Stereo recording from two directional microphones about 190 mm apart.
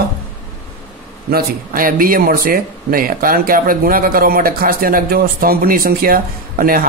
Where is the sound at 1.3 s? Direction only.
50° right (ahead or behind).